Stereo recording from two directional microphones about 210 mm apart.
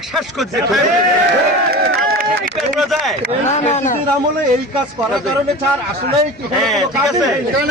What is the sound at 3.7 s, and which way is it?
Speech, 35° left (ahead or behind).